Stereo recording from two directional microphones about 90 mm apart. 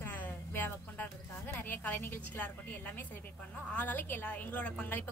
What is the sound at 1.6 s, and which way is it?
A woman's voice, 20° left (ahead or behind).